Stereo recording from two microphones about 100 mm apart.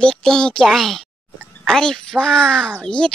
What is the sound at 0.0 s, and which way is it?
Speech, 10° left (ahead or behind).